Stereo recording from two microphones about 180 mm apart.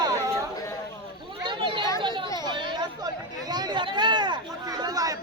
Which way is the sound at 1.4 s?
25° right (ahead or behind).